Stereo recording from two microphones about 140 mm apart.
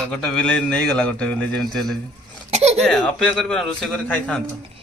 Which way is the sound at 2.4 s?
50° right (ahead or behind).